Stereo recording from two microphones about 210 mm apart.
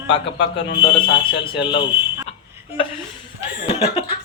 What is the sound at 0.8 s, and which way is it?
Speech, 25° left (ahead or behind).